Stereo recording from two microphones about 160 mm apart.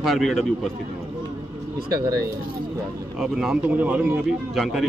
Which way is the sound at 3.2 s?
Centre (ahead or behind).